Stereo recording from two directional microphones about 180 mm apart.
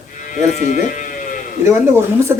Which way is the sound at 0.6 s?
45° left (ahead or behind).